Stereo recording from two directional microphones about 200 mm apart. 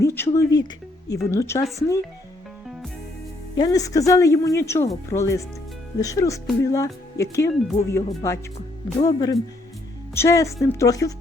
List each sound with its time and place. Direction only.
0.0 s speech: 15° left (ahead or behind)
3.6 s speech: 15° left (ahead or behind)